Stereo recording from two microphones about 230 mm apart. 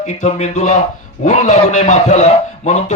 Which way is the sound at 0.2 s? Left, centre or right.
Left.